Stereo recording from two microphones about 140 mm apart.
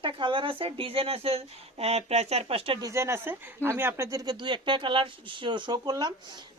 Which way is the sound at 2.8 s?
20° right (ahead or behind).